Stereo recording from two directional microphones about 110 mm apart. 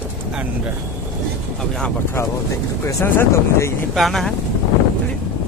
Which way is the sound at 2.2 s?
25° left (ahead or behind).